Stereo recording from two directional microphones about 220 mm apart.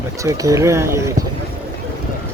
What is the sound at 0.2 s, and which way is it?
Speech, 15° right (ahead or behind).